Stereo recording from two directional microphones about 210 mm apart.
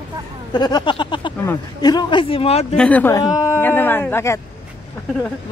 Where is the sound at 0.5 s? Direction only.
20° left (ahead or behind).